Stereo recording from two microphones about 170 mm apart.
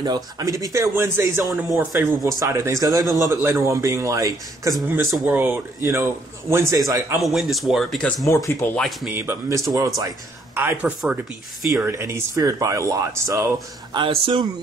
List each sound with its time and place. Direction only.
0.0 s a man's voice: 20° right (ahead or behind)
7.2 s speech: centre (ahead or behind)
8.3 s speech: 15° left (ahead or behind)
8.7 s speech: centre (ahead or behind)
9.1 s a man's voice: 15° right (ahead or behind)
13.9 s speech: 30° right (ahead or behind)